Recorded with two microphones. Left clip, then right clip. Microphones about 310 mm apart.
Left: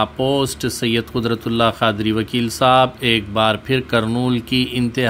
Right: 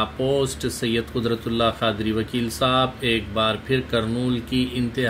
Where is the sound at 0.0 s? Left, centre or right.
Left.